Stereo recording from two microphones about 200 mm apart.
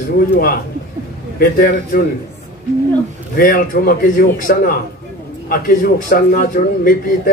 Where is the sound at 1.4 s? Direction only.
45° left (ahead or behind).